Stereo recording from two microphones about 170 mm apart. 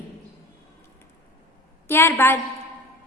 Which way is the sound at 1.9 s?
15° left (ahead or behind).